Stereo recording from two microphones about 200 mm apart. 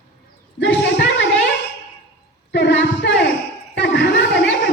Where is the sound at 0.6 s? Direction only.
65° left (ahead or behind).